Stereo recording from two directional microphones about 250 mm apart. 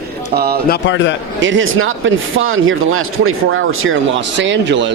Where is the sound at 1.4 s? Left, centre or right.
Right.